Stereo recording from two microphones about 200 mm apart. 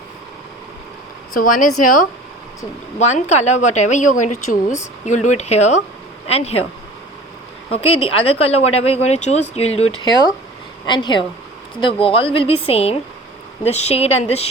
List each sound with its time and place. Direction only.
1.3 s a woman's voice: 45° left (ahead or behind)
7.7 s a woman's voice: 30° left (ahead or behind)